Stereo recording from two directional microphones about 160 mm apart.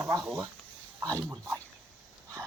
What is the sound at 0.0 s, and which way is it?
Speech, 20° right (ahead or behind).